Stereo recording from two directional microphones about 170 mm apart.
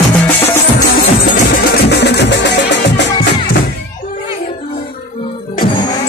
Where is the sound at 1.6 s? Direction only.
70° left (ahead or behind); by 3.1 s 90° left.